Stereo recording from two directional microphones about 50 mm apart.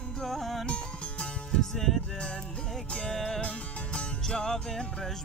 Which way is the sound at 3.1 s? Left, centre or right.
Centre.